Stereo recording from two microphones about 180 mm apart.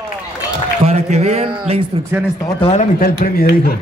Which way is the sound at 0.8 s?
40° right (ahead or behind).